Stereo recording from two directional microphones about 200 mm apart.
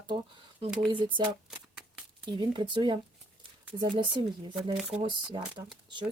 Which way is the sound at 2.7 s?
25° right (ahead or behind).